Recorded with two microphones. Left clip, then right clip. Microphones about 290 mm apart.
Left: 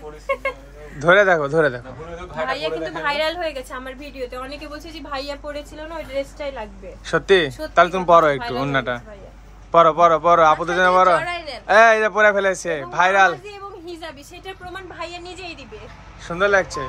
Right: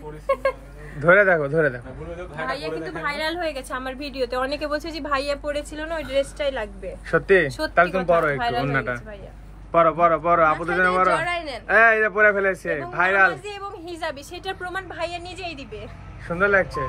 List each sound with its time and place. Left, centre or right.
0.3 s speech: centre
1.0 s a woman's voice: centre
2.3 s a woman's voice: left; by 5.0 s centre
5.1 s a woman's voice: right
7.1 s a woman's voice: centre
11.1 s a sound: right
11.7 s a woman's voice: centre
13.5 s a sound: right
14.7 s a woman's voice: right
16.3 s a woman's voice: centre